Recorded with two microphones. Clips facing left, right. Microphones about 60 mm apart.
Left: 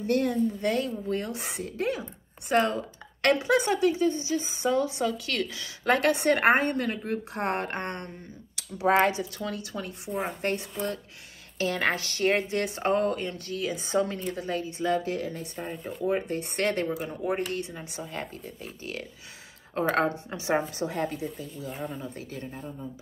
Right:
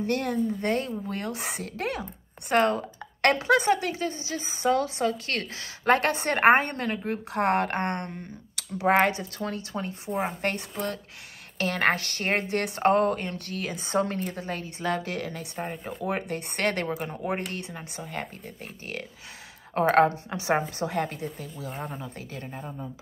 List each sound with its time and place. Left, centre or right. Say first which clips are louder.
0.0 s a woman's voice: left 1 dB; right
1.3 s speech: right 1 dB; right
2.5 s a woman's voice: right 2 dB; right
10.4 s speech: even; right
19.7 s a woman's voice: right 5 dB; right
20.8 s speech: right 1 dB; right
21.6 s speech: even; centre
21.9 s speech: left 1 dB; right